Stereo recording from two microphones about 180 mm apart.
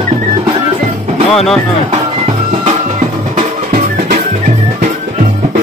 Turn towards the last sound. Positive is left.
turn(degrees=-50)  # may be behind; listen again after turning